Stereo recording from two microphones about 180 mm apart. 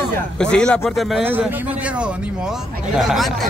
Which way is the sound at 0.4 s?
5° left (ahead or behind).